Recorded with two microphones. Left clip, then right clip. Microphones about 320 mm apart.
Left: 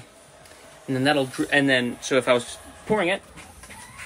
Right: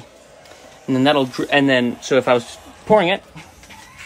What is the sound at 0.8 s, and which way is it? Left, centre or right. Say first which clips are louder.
Speech: right 6 dB; centre.